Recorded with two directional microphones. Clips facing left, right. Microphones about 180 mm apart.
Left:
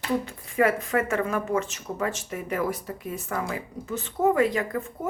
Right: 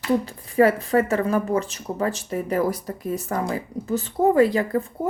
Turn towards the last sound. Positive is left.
turn(degrees=-35)  # may be behind; listen again after turning